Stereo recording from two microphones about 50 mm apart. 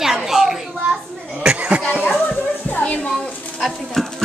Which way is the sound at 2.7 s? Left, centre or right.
Left.